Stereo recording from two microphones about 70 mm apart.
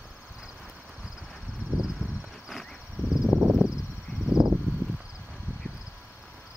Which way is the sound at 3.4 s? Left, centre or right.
Right.